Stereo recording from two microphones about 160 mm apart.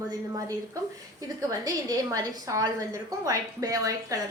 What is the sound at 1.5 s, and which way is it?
A woman's voice, 20° right (ahead or behind).